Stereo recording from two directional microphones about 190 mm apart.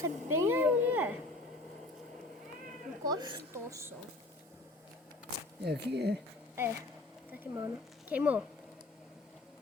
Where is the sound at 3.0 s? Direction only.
20° right (ahead or behind).